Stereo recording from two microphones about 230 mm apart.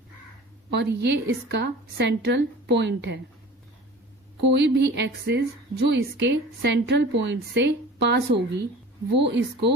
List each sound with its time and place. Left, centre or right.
0.7 s a woman's voice: right
4.4 s a woman's voice: right